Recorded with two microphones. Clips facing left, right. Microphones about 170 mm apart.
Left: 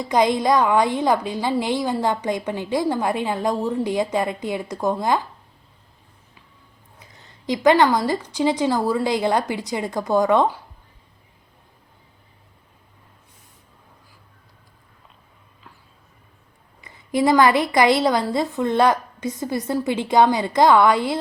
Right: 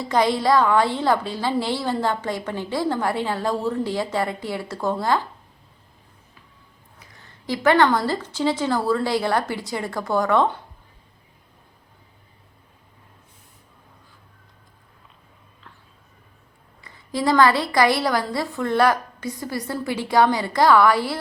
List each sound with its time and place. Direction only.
0.0 s a woman's voice: 15° left (ahead or behind)
7.0 s a woman's voice: 20° left (ahead or behind)
16.8 s a woman's voice: 20° left (ahead or behind)